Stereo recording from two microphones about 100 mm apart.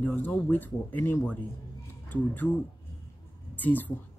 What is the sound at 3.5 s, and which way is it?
Speech, 15° left (ahead or behind).